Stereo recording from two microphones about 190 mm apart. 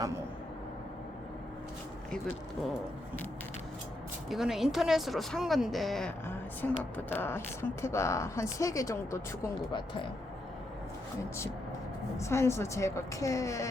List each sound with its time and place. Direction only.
4.3 s speech: centre (ahead or behind); by 10.1 s 25° left (ahead or behind)
12.1 s speech: 15° left (ahead or behind)